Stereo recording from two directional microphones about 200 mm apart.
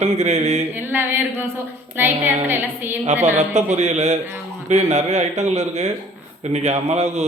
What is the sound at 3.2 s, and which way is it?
Speech, 35° right (ahead or behind).